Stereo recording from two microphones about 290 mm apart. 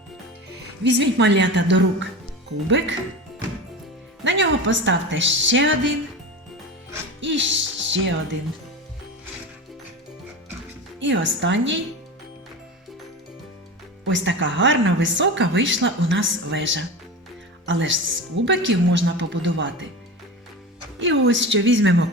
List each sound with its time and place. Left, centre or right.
0.9 s speech: right
4.2 s speech: right
7.2 s music: right
11.0 s speech: right
14.0 s speech: right
21.0 s speech: right